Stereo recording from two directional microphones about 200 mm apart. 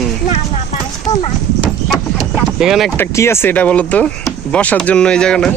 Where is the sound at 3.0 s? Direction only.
15° left (ahead or behind).